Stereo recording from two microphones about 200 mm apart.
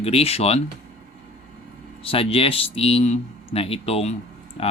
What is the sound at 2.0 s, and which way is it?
Speech, 30° left (ahead or behind).